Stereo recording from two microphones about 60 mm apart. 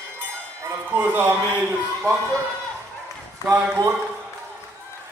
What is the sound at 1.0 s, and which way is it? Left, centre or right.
Speech, right.